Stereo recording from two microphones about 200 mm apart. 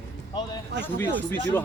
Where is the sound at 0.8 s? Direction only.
10° left (ahead or behind).